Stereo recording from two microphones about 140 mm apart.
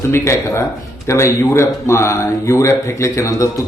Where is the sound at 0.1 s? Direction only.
20° left (ahead or behind).